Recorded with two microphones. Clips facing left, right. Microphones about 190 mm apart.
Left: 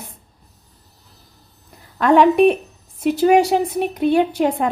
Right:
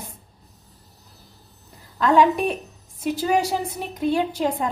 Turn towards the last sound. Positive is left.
turn(degrees=65)  # may be behind; listen again after turning